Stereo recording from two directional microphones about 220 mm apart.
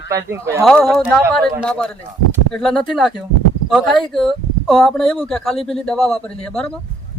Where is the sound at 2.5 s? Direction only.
5° left (ahead or behind).